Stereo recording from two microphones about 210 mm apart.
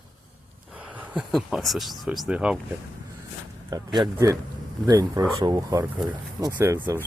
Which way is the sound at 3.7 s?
15° right (ahead or behind).